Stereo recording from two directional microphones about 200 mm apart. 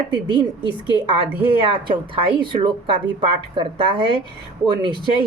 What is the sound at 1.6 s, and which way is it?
A woman's voice, 25° right (ahead or behind).